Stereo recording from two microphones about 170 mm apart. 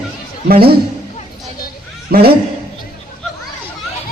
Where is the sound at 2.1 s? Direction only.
65° right (ahead or behind).